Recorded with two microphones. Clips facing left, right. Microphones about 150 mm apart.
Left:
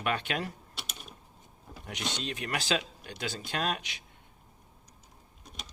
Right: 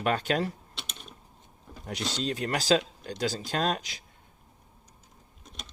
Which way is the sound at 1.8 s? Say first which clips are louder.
Right 5 dB; 35° right (ahead or behind).